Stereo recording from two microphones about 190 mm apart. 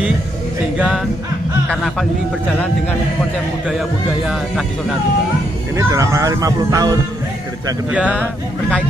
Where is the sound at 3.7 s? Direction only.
5° right (ahead or behind).